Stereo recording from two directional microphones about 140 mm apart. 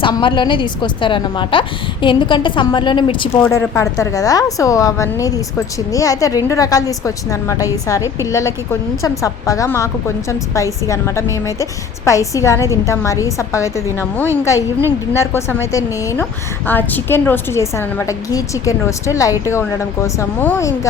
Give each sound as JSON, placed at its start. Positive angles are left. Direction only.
{"t": 0.0, "sound": "speech", "side_deg": 35}
{"t": 3.5, "sound": "a woman's voice", "side_deg": 20}